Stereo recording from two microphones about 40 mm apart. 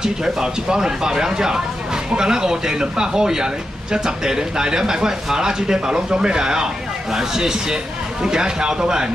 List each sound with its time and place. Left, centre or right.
0.0 s speech: centre